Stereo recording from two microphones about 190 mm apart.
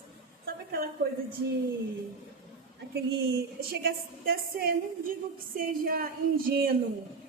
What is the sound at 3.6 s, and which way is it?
A woman's voice, 50° right (ahead or behind).